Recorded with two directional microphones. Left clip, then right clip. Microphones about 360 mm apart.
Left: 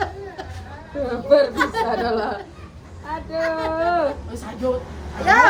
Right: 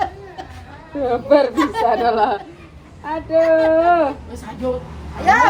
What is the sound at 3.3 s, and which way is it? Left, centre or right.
Speech, centre.